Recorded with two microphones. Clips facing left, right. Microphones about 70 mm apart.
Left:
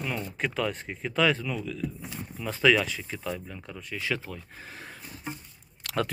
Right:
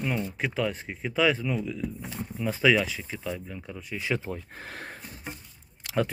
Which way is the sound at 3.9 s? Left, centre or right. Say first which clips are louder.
Right 2 dB; right.